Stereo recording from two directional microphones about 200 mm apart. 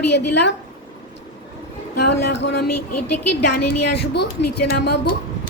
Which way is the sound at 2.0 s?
55° left (ahead or behind).